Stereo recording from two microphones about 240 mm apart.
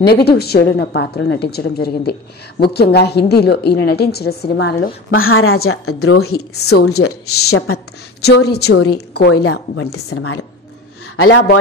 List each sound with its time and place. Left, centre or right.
0.0 s a woman's voice: left
5.2 s a woman's voice: left
6.7 s a man's voice: left
7.0 s a woman's voice: left
8.5 s a woman's voice: left
9.3 s a woman's voice: left
11.2 s a man's voice: left